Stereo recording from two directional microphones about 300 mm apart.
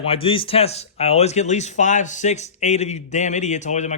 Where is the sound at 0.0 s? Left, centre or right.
Centre.